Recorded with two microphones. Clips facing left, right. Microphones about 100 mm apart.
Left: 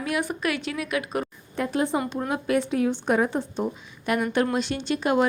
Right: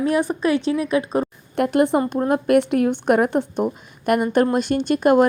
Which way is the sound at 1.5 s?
65° right (ahead or behind).